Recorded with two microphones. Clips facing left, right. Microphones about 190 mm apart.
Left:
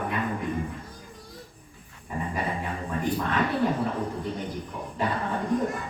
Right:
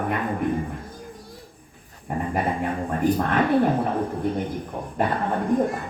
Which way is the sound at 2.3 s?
55° right (ahead or behind).